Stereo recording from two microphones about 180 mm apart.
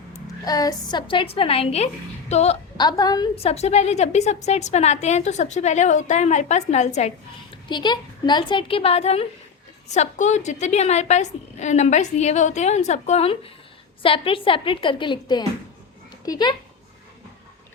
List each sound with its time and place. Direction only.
0.3 s a woman's voice: 20° left (ahead or behind); by 2.6 s 35° left (ahead or behind)
2.7 s a woman's voice: 20° left (ahead or behind)
3.3 s a woman's voice: 35° left (ahead or behind)
7.7 s a woman's voice: 25° left (ahead or behind)